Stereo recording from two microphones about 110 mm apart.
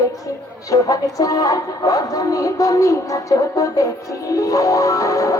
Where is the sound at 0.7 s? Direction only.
30° left (ahead or behind).